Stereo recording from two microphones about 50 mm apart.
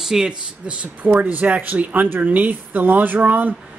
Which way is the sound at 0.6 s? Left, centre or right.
Right.